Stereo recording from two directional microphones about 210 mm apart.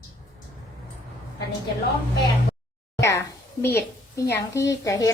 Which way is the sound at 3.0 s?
15° left (ahead or behind).